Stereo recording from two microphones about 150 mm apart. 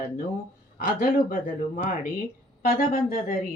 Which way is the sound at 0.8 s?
70° left (ahead or behind).